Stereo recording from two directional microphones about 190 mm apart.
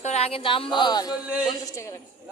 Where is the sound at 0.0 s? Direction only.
35° left (ahead or behind).